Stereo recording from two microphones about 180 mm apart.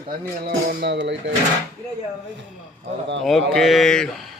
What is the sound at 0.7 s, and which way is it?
Speech, 65° right (ahead or behind).